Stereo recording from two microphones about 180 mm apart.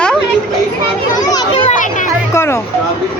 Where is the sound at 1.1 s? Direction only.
20° left (ahead or behind).